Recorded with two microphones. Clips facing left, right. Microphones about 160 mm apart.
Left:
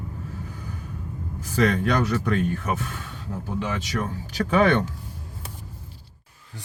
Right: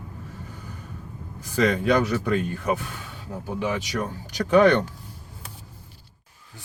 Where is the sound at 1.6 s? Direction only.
10° right (ahead or behind).